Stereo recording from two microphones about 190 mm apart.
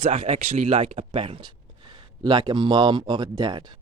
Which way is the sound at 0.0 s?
40° right (ahead or behind).